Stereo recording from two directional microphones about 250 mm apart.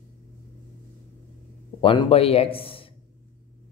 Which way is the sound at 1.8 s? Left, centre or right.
Left.